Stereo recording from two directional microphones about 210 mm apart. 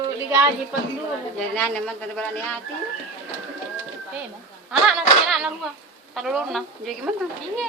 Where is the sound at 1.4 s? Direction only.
5° left (ahead or behind).